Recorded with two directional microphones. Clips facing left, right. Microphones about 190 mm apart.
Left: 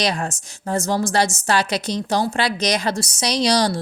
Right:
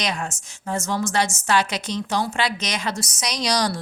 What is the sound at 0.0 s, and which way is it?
A woman's voice, 35° left (ahead or behind).